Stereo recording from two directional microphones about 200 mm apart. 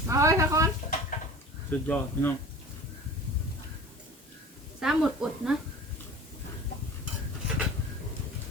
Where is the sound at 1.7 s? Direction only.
10° left (ahead or behind).